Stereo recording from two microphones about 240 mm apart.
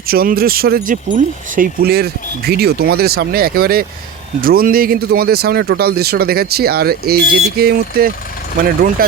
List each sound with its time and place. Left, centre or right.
0.1 s speech: right